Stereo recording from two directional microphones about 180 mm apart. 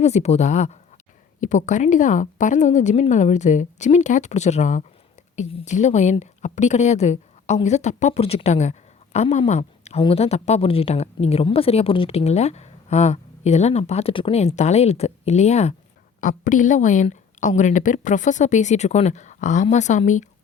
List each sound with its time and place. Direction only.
0.0 s a woman's voice: 35° left (ahead or behind)